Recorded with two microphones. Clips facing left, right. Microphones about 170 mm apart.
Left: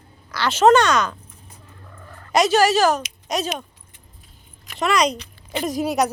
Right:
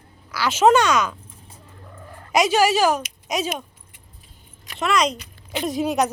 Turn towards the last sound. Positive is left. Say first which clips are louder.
# even
turn(degrees=0)  # may be behind; listen again after turning